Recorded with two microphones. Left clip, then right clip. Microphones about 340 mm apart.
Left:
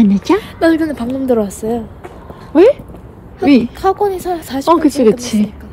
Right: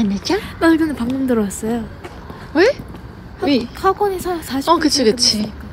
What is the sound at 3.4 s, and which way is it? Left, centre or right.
Speech, centre.